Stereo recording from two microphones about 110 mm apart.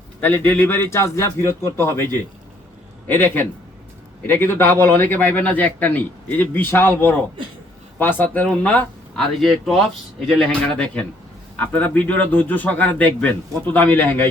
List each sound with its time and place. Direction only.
0.2 s a man's voice: 15° left (ahead or behind)
9.4 s a man's voice: centre (ahead or behind); by 14.3 s 20° left (ahead or behind)